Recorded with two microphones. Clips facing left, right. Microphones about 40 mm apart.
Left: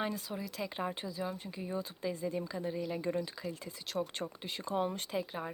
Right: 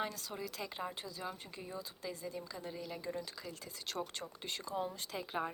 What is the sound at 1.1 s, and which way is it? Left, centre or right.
Speech, centre.